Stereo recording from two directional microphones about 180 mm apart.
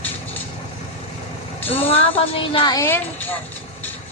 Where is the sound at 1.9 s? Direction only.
30° left (ahead or behind).